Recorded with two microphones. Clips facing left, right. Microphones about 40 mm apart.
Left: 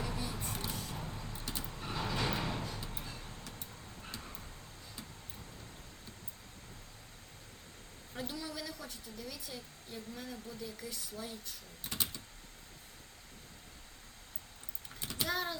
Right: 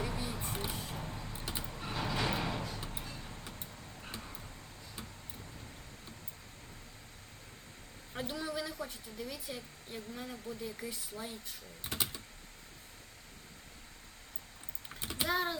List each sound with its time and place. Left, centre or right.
0.0 s a sound: centre
1.3 s vehicle: centre
1.6 s vehicle: centre
3.6 s vehicle: right
4.2 s vehicle: centre
8.1 s a woman's voice: right
11.8 s computer keyboard: right
14.8 s a sound: right